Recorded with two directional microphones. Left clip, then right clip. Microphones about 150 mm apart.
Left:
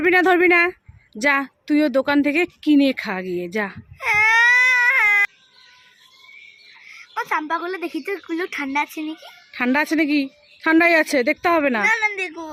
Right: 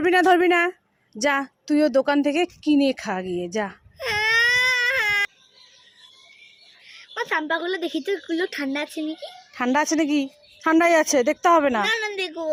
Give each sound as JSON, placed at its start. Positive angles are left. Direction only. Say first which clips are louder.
{"t": 0.0, "sound": "a woman's voice", "louder": "left 2 dB", "side_deg": 15}
{"t": 4.3, "sound": "baby cry", "louder": "left 3 dB", "side_deg": 25}
{"t": 7.1, "sound": "a woman's voice", "louder": "left 1 dB", "side_deg": 25}
{"t": 9.5, "sound": "a woman's voice", "louder": "left 2 dB", "side_deg": 20}